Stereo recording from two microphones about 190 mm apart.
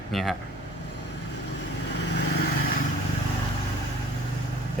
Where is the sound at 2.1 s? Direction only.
60° left (ahead or behind).